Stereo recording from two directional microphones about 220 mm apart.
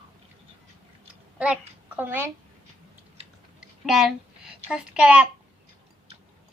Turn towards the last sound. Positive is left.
turn(degrees=-5)  # may be behind; listen again after turning